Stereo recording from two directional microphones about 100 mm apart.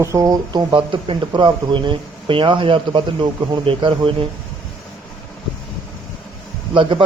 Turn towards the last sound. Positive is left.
turn(degrees=-60)  # may be behind; listen again after turning